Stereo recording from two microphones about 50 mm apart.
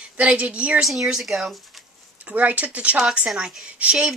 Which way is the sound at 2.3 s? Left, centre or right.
Right.